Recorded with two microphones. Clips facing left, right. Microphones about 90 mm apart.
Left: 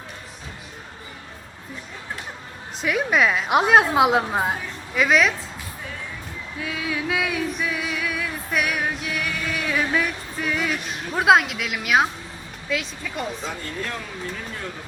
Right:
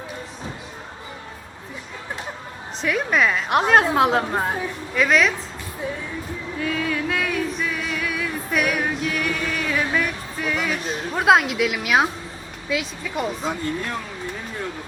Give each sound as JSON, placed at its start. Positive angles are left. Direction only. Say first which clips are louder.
{"t": 2.8, "sound": "a woman's voice", "louder": "even", "side_deg": 0}
{"t": 6.6, "sound": "a sound", "louder": "right 3 dB", "side_deg": 5}
{"t": 12.6, "sound": "a woman's voice", "louder": "right 2 dB", "side_deg": 0}